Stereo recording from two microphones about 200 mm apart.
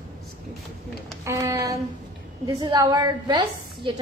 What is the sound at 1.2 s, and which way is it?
A woman's voice, 15° right (ahead or behind).